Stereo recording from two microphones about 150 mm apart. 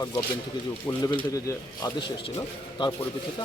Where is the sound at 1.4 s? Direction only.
25° left (ahead or behind).